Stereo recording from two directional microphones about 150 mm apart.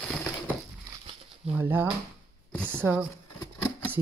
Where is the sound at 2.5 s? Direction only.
10° left (ahead or behind).